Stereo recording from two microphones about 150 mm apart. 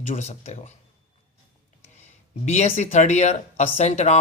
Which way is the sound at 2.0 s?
50° left (ahead or behind).